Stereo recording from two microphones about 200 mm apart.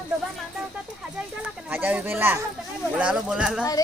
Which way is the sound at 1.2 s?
5° right (ahead or behind).